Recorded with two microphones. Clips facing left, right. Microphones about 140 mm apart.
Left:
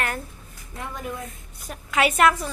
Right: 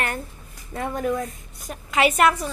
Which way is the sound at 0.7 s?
55° right (ahead or behind).